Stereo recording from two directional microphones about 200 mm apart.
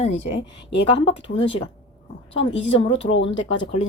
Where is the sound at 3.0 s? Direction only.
30° left (ahead or behind).